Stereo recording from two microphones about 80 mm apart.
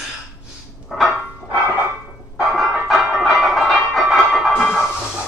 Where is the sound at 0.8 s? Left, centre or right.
Centre.